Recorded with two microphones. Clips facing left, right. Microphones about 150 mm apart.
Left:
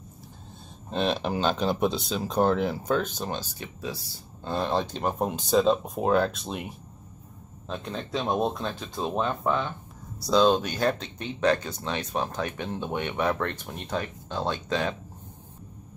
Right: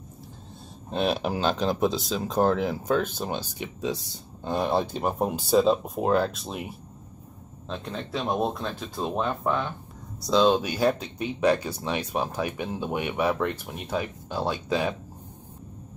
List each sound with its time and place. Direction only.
0.8 s speech: 5° right (ahead or behind)